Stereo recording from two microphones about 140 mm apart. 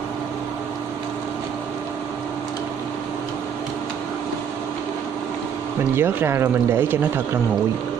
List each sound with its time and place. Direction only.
5.9 s speech: 15° right (ahead or behind)